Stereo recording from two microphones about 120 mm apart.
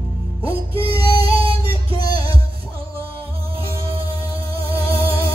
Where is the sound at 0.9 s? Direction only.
35° left (ahead or behind).